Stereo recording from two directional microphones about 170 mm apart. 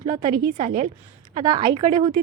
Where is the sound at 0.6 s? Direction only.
45° right (ahead or behind).